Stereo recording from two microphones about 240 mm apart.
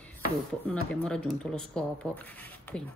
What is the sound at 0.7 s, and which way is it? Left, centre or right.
Speech, centre.